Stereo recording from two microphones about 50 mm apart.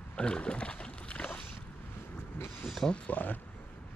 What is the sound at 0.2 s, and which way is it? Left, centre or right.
Wild animals, centre.